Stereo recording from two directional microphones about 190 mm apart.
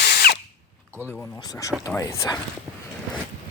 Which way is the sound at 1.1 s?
5° left (ahead or behind).